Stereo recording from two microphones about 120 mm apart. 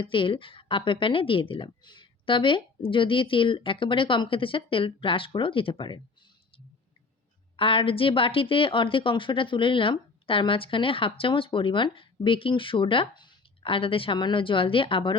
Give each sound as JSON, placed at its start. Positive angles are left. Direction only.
{"t": 0.0, "sound": "a woman's voice", "side_deg": 45}
{"t": 7.5, "sound": "a woman's voice", "side_deg": 45}